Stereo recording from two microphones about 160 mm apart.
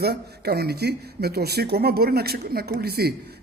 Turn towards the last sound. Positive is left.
turn(degrees=-80)